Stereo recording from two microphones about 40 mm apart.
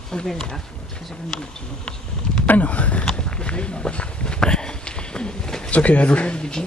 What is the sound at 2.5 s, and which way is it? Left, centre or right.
Speech, left.